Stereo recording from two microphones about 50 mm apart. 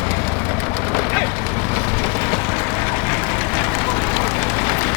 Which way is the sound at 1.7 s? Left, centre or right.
Left.